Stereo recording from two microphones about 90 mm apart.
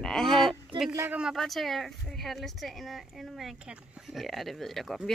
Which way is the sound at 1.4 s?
Centre (ahead or behind).